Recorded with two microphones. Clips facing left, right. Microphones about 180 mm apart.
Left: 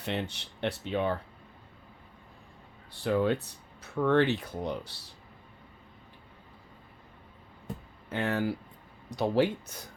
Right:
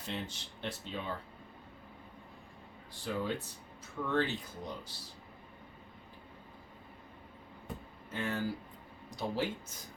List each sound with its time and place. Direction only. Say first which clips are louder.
0.0 s speech: left 7 dB; 65° left (ahead or behind)
3.0 s speech: left 9 dB; 65° left (ahead or behind)
8.1 s speech: left 6 dB; 65° left (ahead or behind)